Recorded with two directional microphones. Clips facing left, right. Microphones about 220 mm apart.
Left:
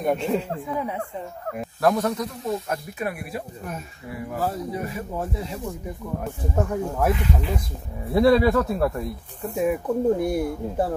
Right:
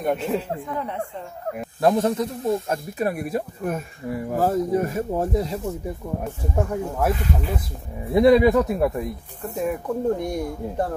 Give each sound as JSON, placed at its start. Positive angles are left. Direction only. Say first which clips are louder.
{"t": 0.0, "sound": "speech", "louder": "even", "side_deg": 0}
{"t": 1.8, "sound": "speech", "louder": "right 2 dB", "side_deg": -25}
{"t": 2.7, "sound": "speech", "louder": "right 4 dB", "side_deg": -35}
{"t": 6.5, "sound": "speech", "louder": "even", "side_deg": -5}
{"t": 8.1, "sound": "speech", "louder": "right 2 dB", "side_deg": -15}
{"t": 9.5, "sound": "speech", "louder": "left 2 dB", "side_deg": 5}